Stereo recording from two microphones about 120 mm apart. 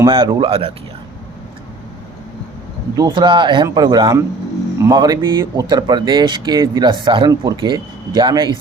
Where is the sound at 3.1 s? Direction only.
40° right (ahead or behind).